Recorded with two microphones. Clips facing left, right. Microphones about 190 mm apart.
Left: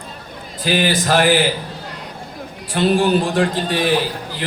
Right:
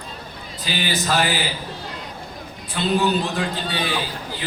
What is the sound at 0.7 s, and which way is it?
Speech, 55° left (ahead or behind).